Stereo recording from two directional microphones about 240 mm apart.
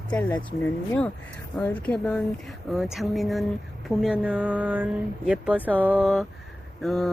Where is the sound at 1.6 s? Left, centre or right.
Centre.